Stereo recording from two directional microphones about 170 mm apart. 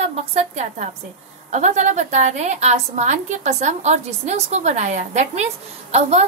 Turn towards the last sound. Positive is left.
turn(degrees=-40)  # may be behind; listen again after turning